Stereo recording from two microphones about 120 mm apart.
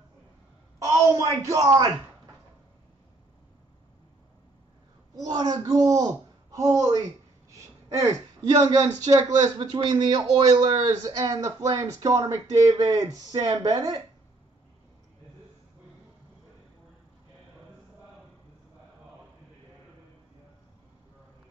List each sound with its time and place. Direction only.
0.7 s a woman's voice: 25° right (ahead or behind)
5.1 s a man's voice: 35° right (ahead or behind)
8.0 s speech: 30° right (ahead or behind)